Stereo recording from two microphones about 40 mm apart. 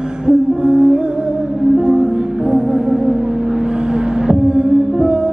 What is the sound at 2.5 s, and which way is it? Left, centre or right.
Music, centre.